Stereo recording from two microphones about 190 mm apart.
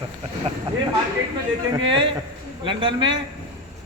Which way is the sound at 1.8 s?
25° right (ahead or behind).